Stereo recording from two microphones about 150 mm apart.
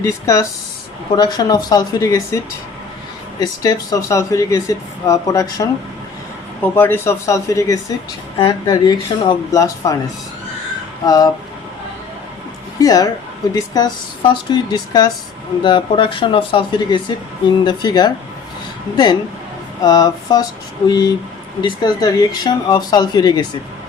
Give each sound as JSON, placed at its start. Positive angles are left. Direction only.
{"t": 0.0, "sound": "speech", "side_deg": 20}
{"t": 3.4, "sound": "speech", "side_deg": 25}
{"t": 11.0, "sound": "speech", "side_deg": 25}
{"t": 12.8, "sound": "speech", "side_deg": 25}
{"t": 19.8, "sound": "speech", "side_deg": 25}